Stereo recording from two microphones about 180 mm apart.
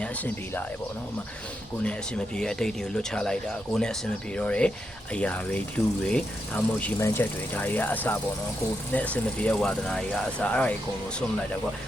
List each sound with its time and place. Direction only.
0.0 s speech: 10° left (ahead or behind)
1.8 s speech: 5° left (ahead or behind)